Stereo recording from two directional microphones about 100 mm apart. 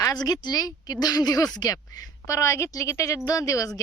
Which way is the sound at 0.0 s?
40° left (ahead or behind).